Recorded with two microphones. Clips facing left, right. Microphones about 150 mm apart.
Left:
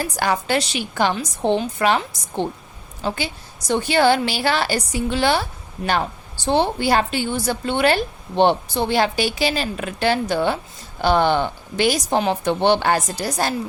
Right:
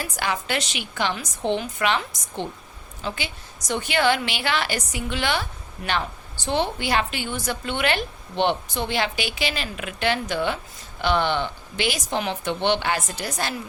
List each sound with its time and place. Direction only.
0.0 s a woman's voice: 40° left (ahead or behind)